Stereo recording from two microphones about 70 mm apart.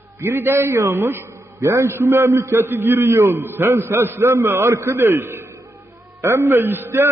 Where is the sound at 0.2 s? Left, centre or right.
Right.